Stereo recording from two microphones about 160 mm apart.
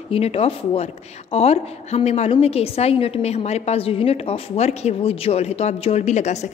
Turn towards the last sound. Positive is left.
turn(degrees=45)  # may be behind; listen again after turning